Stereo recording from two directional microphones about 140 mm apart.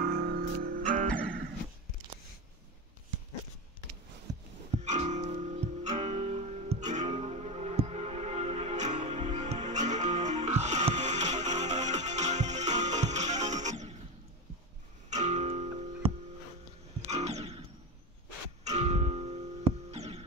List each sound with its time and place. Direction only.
0.0 s music: 90° right; by 1.4 s 75° right (ahead or behind)
4.8 s music: 55° right (ahead or behind)
15.0 s music: 55° right (ahead or behind)
17.1 s music: 50° right (ahead or behind)
18.6 s music: 55° right (ahead or behind)